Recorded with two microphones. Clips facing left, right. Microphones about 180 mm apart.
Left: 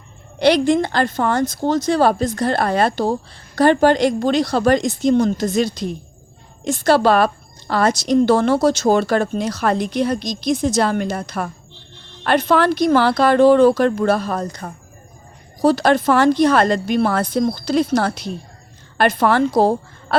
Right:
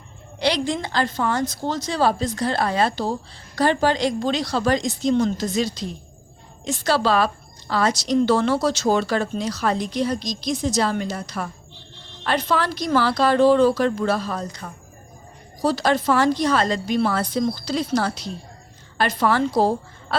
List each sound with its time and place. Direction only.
0.3 s a woman's voice: 55° left (ahead or behind)